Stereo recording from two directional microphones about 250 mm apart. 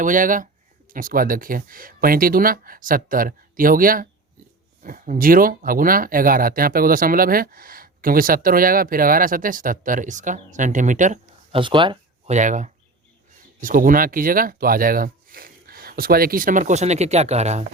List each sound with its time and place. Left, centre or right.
0.0 s speech: right